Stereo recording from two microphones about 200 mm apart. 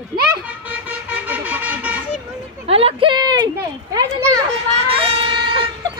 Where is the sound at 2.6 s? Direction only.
30° right (ahead or behind).